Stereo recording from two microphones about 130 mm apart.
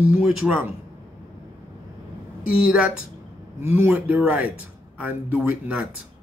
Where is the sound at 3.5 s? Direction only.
15° right (ahead or behind).